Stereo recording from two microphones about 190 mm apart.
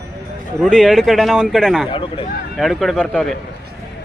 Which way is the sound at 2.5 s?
Centre (ahead or behind).